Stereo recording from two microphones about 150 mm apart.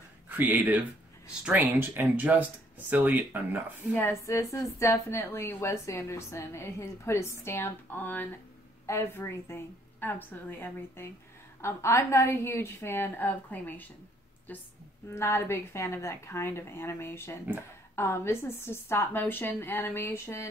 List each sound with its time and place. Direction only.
0.4 s speech: 10° right (ahead or behind)
3.9 s a woman's voice: 15° left (ahead or behind)